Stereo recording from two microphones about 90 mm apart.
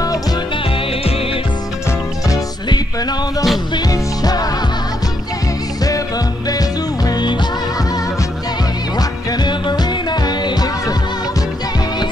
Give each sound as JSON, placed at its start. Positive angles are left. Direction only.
{"t": 1.0, "sound": "music", "side_deg": 90}
{"t": 1.9, "sound": "music", "side_deg": 40}
{"t": 5.9, "sound": "music", "side_deg": 40}
{"t": 8.9, "sound": "music", "side_deg": 50}